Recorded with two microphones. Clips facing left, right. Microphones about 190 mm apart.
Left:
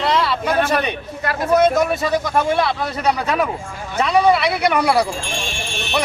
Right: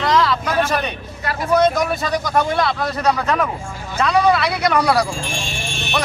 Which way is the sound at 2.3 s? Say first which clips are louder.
Even; 5° left (ahead or behind).